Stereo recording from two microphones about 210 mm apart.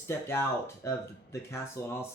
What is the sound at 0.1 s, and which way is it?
Speech, 10° left (ahead or behind).